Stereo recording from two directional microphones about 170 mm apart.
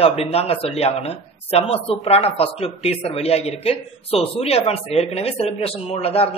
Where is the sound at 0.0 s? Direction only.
35° left (ahead or behind).